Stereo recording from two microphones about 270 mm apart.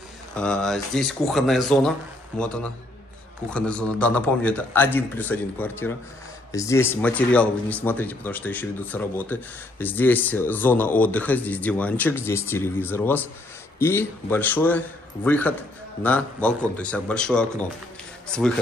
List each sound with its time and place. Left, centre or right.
0.4 s a man's voice: centre